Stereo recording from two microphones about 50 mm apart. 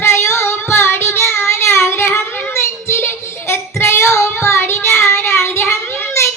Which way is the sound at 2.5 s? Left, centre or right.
Left.